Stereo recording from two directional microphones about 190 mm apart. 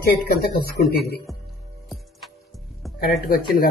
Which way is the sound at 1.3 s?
Centre (ahead or behind).